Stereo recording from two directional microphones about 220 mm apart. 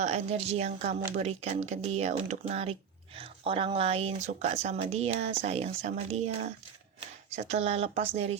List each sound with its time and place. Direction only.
0.0 s speech: 30° right (ahead or behind)